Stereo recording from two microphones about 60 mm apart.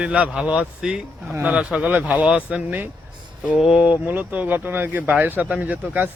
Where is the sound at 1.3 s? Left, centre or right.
Right.